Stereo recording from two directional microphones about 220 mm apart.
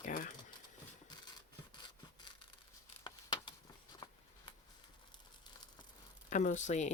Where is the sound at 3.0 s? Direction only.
20° left (ahead or behind).